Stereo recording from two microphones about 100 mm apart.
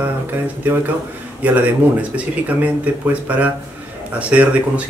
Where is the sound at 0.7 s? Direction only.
15° right (ahead or behind).